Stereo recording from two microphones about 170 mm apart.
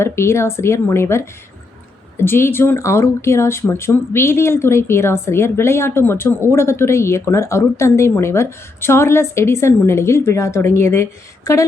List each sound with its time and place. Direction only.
0.0 s speech: 15° left (ahead or behind)